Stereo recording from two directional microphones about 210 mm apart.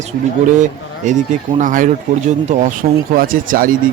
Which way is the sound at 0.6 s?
35° right (ahead or behind).